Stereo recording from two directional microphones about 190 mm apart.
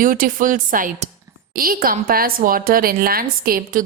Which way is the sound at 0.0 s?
45° right (ahead or behind).